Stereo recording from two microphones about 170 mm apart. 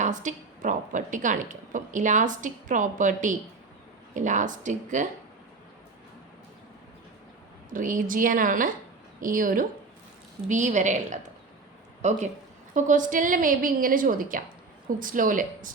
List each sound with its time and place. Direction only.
0.0 s a woman's voice: 45° right (ahead or behind)
7.7 s a woman's voice: 50° right (ahead or behind)